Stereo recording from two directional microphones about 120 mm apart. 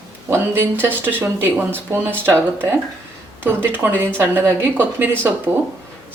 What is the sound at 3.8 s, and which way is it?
A woman's voice, 15° right (ahead or behind).